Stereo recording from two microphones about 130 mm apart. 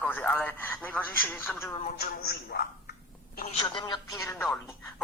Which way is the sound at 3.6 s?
35° left (ahead or behind).